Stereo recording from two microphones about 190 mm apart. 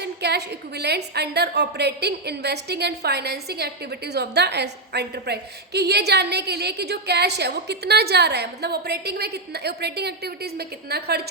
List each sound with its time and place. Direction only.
0.0 s a woman's voice: 60° right (ahead or behind)